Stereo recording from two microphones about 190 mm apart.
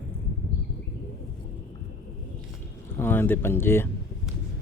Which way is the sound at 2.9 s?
10° left (ahead or behind).